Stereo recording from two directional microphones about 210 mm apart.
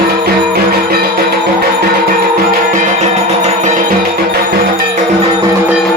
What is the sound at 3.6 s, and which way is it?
Music, 35° right (ahead or behind).